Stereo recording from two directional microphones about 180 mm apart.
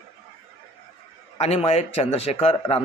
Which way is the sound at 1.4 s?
35° left (ahead or behind).